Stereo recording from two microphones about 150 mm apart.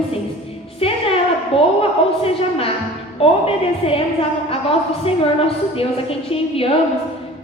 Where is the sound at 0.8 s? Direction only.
40° left (ahead or behind).